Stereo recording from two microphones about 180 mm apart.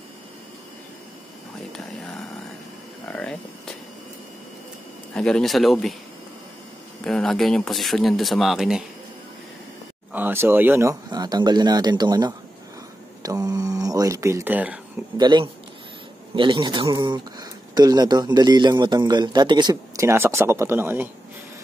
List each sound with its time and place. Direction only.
1.7 s a sound: 5° left (ahead or behind)
5.1 s speech: 5° left (ahead or behind)
7.1 s speech: 5° left (ahead or behind)
10.1 s speech: 10° right (ahead or behind)
13.2 s a sound: 20° right (ahead or behind)
15.1 s speech: 25° right (ahead or behind)